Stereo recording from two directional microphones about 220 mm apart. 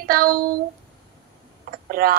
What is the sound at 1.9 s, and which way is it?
Speech, 40° right (ahead or behind).